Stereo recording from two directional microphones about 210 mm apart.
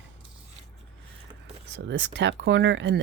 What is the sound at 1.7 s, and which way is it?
Speech, 55° right (ahead or behind).